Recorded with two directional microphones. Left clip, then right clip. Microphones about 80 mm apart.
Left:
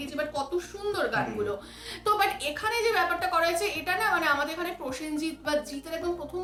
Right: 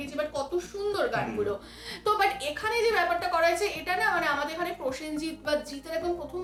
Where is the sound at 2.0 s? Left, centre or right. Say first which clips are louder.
Even; left.